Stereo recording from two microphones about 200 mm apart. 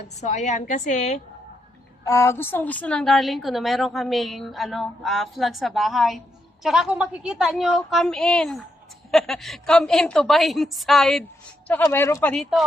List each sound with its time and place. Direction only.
0.2 s a woman's voice: 35° left (ahead or behind)
2.0 s a woman's voice: 15° left (ahead or behind)
11.8 s speech: 15° left (ahead or behind)
12.3 s a woman's voice: centre (ahead or behind)